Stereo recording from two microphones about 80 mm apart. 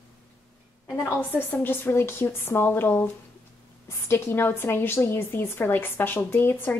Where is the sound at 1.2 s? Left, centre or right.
Left.